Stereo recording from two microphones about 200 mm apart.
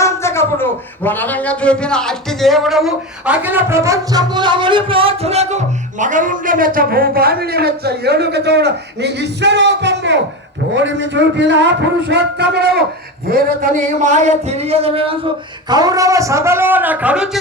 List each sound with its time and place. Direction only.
0.0 s a man's voice: 15° left (ahead or behind); by 15.1 s 30° right (ahead or behind)
15.7 s a man's voice: 20° right (ahead or behind)